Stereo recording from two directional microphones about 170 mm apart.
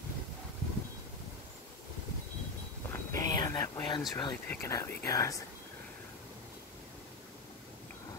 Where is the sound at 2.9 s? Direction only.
15° left (ahead or behind).